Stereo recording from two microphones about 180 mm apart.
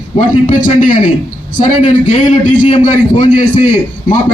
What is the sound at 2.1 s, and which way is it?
A man's voice, 45° left (ahead or behind).